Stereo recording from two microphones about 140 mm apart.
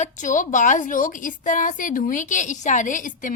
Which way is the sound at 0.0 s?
65° left (ahead or behind).